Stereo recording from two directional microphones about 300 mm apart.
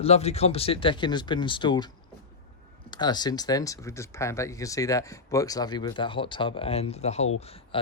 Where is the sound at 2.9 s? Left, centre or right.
Centre.